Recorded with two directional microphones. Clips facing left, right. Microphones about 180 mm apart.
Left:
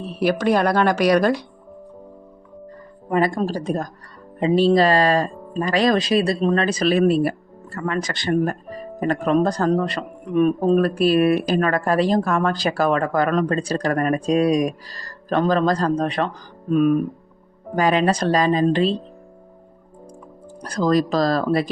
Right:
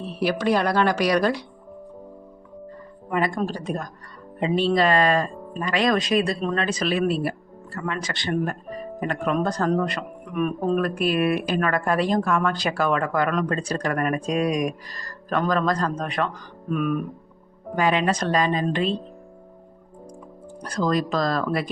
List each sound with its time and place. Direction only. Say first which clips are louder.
0.2 s speech: left 3 dB; 50° left (ahead or behind)
3.4 s speech: left 4 dB; 40° left (ahead or behind)
20.7 s speech: left 4 dB; 35° left (ahead or behind)